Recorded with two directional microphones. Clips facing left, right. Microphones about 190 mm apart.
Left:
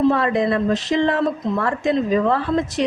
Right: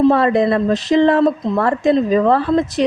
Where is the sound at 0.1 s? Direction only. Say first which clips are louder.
Right 5 dB; 35° right (ahead or behind).